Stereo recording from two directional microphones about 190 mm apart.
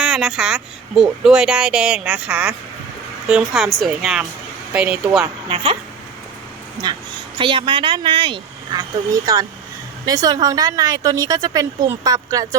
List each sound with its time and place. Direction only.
0.0 s speech: 5° right (ahead or behind)
5.5 s a woman's voice: 25° right (ahead or behind)
6.8 s a woman's voice: 25° right (ahead or behind)